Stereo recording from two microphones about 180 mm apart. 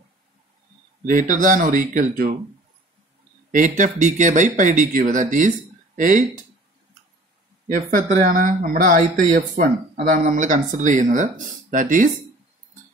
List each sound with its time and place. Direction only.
1.0 s speech: 45° right (ahead or behind)
3.5 s speech: 45° right (ahead or behind)
7.6 s speech: 45° right (ahead or behind)